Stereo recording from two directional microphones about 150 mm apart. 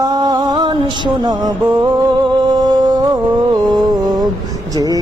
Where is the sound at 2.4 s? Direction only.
25° right (ahead or behind).